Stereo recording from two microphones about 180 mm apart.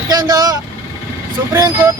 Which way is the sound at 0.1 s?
20° right (ahead or behind).